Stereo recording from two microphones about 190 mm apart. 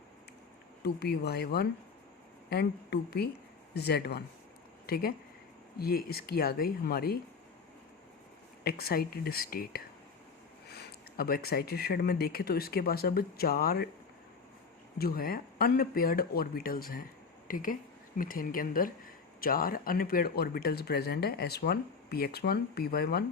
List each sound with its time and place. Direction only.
0.8 s speech: 60° left (ahead or behind)
8.6 s speech: 55° left (ahead or behind)
14.9 s speech: 55° left (ahead or behind)